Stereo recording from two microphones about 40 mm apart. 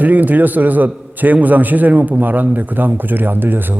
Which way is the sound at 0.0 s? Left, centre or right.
Right.